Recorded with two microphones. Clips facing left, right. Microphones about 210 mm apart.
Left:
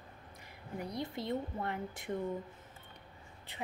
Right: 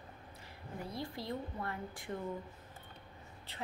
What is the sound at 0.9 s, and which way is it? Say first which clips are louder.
A woman's voice: left 4 dB; 20° left (ahead or behind).